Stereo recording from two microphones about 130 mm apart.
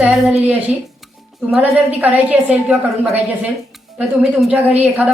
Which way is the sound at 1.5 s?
5° right (ahead or behind).